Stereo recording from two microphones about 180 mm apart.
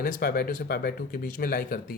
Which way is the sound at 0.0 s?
55° left (ahead or behind).